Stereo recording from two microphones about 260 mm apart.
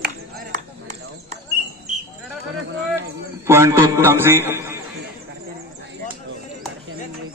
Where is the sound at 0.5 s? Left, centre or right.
Right.